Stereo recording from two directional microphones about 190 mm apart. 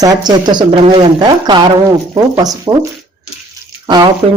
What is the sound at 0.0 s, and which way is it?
Speech, 20° right (ahead or behind).